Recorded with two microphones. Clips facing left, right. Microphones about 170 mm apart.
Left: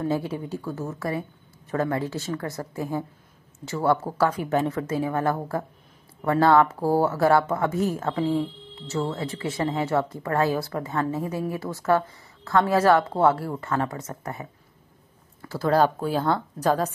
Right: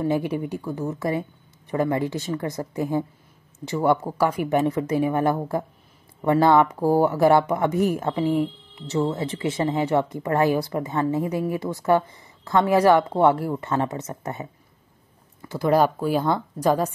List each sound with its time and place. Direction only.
0.0 s speech: 15° right (ahead or behind)